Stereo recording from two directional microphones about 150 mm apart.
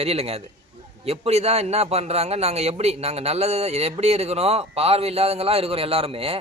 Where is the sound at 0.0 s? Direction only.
45° right (ahead or behind).